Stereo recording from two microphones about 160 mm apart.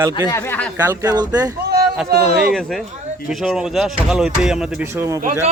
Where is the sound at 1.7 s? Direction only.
80° right.